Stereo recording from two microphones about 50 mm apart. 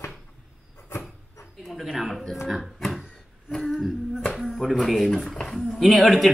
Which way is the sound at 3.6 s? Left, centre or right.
Centre.